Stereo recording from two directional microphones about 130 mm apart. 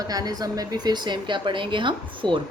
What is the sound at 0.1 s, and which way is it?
A woman's voice, 30° right (ahead or behind).